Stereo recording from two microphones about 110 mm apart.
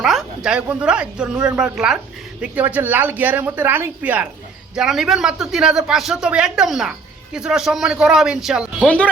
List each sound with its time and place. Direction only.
0.0 s speech: 5° right (ahead or behind)
4.7 s speech: 5° right (ahead or behind)